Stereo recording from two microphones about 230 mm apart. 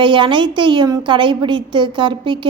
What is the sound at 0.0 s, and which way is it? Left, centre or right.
A woman's voice, right.